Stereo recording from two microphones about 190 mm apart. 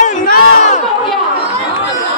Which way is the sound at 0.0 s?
40° left (ahead or behind).